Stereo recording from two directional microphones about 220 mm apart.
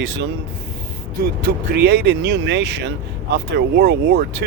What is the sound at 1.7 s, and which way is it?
Speech, 50° right (ahead or behind).